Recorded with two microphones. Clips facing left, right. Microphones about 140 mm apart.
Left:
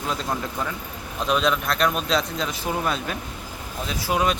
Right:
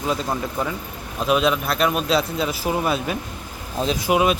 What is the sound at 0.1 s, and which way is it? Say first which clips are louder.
Speech: right 3 dB; 5° right (ahead or behind).